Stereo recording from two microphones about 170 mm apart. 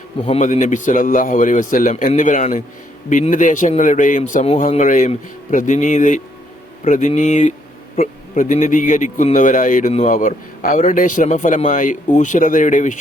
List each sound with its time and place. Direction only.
0.3 s a man's voice: 40° left (ahead or behind)